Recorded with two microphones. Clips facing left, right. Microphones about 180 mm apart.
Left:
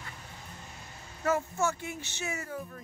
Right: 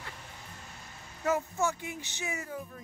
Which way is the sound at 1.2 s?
15° right (ahead or behind).